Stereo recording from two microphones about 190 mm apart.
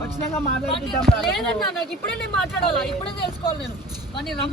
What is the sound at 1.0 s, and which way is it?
Speech, centre (ahead or behind).